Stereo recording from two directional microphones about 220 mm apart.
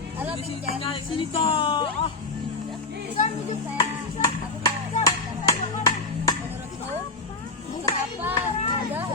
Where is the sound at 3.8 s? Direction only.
20° left (ahead or behind).